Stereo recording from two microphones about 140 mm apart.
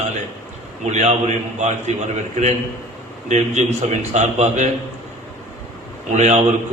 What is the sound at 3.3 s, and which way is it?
A man's voice, 55° right (ahead or behind).